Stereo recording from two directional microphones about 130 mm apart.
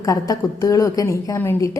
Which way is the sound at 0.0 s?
25° left (ahead or behind).